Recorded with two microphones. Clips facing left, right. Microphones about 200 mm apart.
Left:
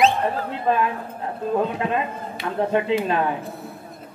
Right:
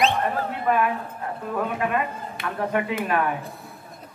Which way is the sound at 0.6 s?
25° left (ahead or behind).